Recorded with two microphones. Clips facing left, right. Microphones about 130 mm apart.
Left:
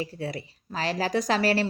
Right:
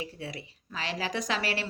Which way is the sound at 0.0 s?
40° left (ahead or behind).